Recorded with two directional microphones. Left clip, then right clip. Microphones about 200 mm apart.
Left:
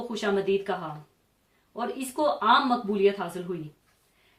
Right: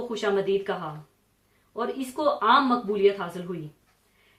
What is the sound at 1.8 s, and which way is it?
A woman's voice, 35° left (ahead or behind).